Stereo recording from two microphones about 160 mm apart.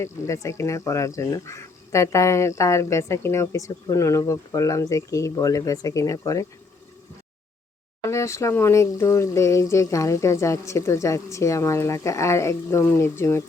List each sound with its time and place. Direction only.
0.0 s speech: 20° left (ahead or behind)
8.0 s speech: 20° left (ahead or behind)